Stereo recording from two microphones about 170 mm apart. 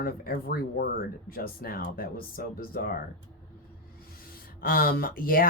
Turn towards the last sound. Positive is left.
turn(degrees=60)  # may be behind; listen again after turning